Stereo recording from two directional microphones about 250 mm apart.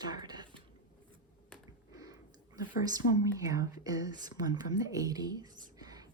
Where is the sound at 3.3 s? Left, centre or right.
Centre.